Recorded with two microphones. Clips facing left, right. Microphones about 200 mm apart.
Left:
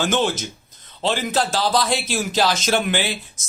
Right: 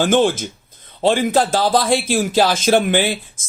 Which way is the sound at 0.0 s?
50° right (ahead or behind).